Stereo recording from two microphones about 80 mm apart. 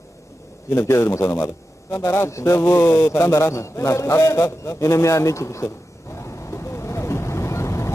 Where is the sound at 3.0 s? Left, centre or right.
Left.